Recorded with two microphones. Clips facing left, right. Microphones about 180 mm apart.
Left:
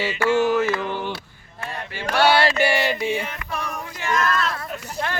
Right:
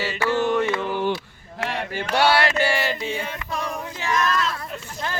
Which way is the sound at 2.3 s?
30° left (ahead or behind).